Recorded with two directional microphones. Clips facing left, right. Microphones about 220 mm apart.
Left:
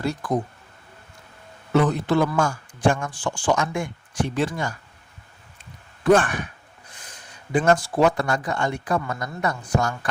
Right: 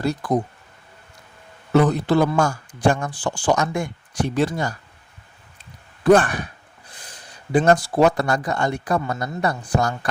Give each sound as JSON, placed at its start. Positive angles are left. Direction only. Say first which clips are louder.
{"t": 0.0, "sound": "speech", "louder": "right 3 dB", "side_deg": -35}
{"t": 1.7, "sound": "speech", "louder": "right 3 dB", "side_deg": -35}
{"t": 6.1, "sound": "speech", "louder": "right 3 dB", "side_deg": -35}